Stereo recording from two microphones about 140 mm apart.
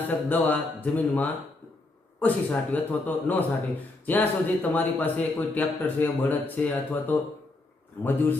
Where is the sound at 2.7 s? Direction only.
10° left (ahead or behind).